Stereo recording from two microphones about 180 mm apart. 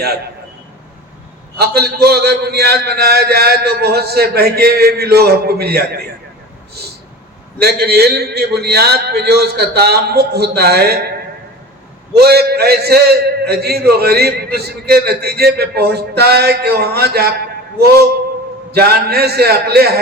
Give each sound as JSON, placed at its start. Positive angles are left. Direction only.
{"t": 1.5, "sound": "a man's voice", "side_deg": -60}
{"t": 7.6, "sound": "a man's voice", "side_deg": -60}
{"t": 12.2, "sound": "a man's voice", "side_deg": -60}